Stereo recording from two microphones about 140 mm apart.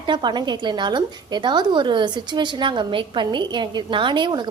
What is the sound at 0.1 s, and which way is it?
A woman's voice, 35° right (ahead or behind).